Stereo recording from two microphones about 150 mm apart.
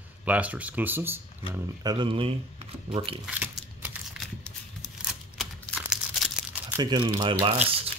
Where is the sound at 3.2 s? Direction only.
5° right (ahead or behind).